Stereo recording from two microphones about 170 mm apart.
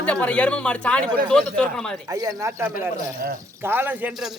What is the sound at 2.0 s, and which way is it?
Speech, 20° right (ahead or behind).